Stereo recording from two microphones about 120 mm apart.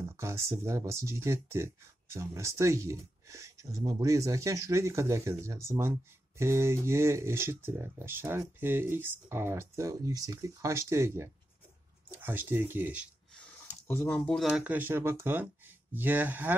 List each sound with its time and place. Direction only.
0.2 s speech: 25° right (ahead or behind)
13.4 s a sound: 15° left (ahead or behind)
14.5 s speech: 15° right (ahead or behind)